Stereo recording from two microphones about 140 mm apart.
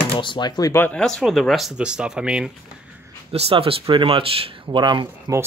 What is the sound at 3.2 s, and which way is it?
Speech, 45° right (ahead or behind).